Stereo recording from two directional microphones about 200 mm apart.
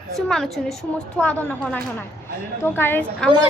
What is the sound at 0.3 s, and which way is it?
A woman's voice, centre (ahead or behind).